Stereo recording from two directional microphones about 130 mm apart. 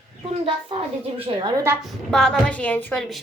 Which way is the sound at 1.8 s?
5° left (ahead or behind).